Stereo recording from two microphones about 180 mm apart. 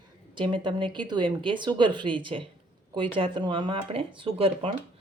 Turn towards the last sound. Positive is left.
turn(degrees=-30)  # may be behind; listen again after turning